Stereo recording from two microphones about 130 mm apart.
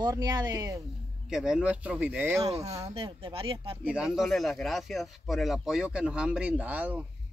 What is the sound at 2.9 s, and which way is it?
Speech, 40° right (ahead or behind).